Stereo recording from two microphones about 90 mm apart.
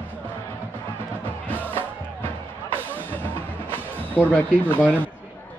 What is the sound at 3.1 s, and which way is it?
Music, 20° left (ahead or behind).